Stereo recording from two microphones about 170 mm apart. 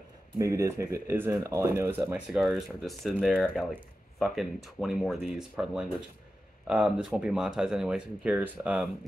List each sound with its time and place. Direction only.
0.4 s speech: 20° right (ahead or behind)